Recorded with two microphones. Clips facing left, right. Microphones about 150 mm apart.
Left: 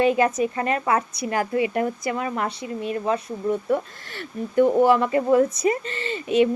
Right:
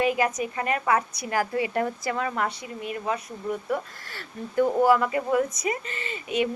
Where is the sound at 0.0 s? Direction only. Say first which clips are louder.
Left 5 dB; 30° left (ahead or behind).